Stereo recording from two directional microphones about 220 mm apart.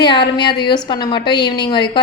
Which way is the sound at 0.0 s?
20° left (ahead or behind).